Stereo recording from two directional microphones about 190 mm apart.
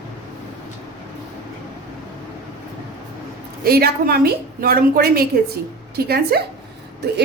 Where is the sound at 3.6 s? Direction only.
55° right (ahead or behind).